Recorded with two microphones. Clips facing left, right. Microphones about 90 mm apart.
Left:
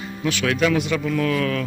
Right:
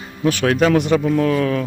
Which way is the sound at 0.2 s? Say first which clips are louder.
Right 5 dB; 40° right (ahead or behind).